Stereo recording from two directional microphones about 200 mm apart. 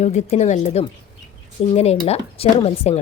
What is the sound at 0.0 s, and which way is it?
Speech, 35° left (ahead or behind).